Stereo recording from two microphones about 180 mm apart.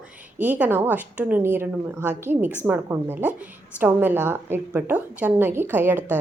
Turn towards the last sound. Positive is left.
turn(degrees=-10)  # may be behind; listen again after turning